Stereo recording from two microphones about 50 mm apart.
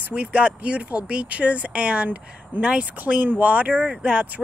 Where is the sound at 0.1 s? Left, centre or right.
Right.